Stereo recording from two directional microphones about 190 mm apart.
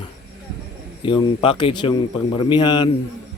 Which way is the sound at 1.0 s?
25° left (ahead or behind).